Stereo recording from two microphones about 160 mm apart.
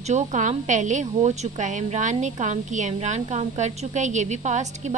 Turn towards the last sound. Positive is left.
turn(degrees=-45)  # may be behind; listen again after turning